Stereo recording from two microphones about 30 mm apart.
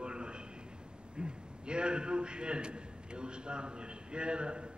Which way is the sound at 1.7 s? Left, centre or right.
Right.